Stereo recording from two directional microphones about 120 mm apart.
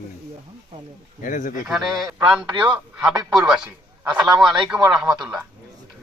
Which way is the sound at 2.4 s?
10° right (ahead or behind).